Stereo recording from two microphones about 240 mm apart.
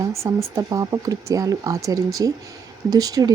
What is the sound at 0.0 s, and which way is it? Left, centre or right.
Speech, centre.